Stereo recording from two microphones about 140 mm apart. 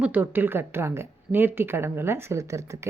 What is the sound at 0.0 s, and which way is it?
Speech, 15° right (ahead or behind).